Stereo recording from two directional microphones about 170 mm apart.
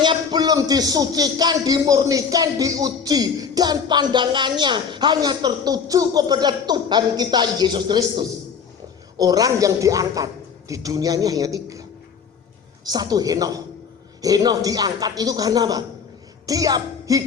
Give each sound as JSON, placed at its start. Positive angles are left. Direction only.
{"t": 0.0, "sound": "speech", "side_deg": -25}